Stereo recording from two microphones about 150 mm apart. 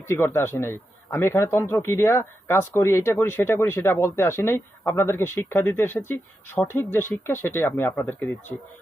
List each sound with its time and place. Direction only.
0.3 s speech: 15° left (ahead or behind)